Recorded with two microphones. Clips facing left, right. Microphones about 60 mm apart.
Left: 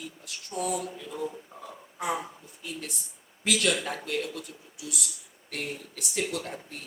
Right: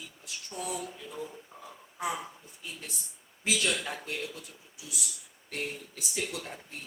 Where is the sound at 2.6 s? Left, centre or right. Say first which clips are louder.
Left 5 dB; left.